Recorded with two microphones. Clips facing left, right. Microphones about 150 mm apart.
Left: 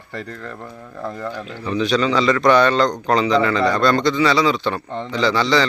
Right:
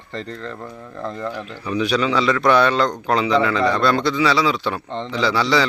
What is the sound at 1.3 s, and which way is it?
A man's voice, 10° right (ahead or behind).